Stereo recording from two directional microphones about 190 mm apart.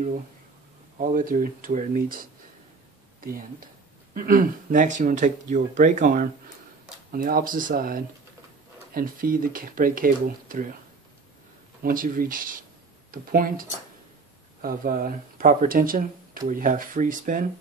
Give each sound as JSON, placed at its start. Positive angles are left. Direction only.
{"t": 0.9, "sound": "speech", "side_deg": -45}
{"t": 4.1, "sound": "speech", "side_deg": -45}
{"t": 11.8, "sound": "speech", "side_deg": -45}